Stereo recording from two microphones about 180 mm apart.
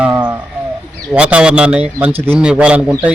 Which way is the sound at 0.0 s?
10° right (ahead or behind).